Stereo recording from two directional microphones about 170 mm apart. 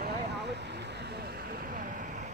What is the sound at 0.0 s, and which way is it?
Vehicle, 75° right (ahead or behind).